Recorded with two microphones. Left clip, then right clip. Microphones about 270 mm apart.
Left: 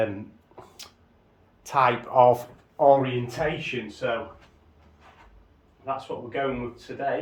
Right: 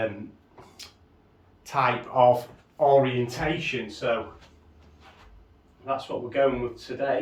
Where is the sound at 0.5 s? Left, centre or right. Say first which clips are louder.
Left 1 dB; left.